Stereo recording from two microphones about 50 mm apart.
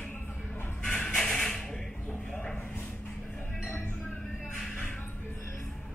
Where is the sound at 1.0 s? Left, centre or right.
Centre.